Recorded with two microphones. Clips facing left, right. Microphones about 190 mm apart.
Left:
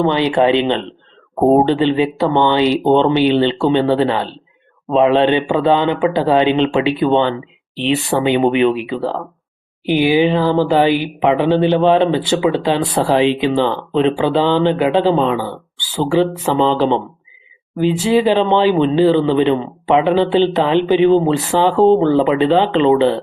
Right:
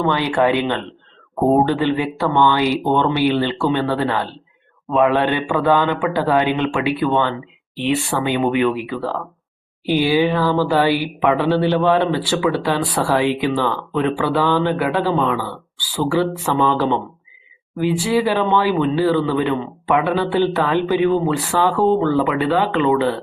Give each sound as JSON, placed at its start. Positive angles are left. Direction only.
{"t": 0.0, "sound": "speech", "side_deg": 20}